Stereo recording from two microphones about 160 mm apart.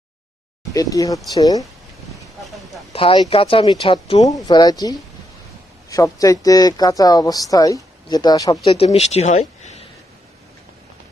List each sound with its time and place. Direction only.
0.7 s speech: 20° left (ahead or behind)
2.9 s speech: 35° left (ahead or behind)
8.6 s speech: 40° left (ahead or behind)